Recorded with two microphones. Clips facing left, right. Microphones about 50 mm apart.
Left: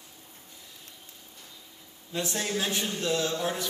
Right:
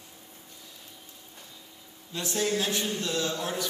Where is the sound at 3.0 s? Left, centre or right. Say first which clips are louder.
Left 2 dB; left.